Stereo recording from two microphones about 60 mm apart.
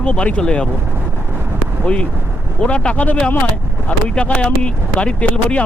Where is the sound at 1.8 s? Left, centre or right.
Centre.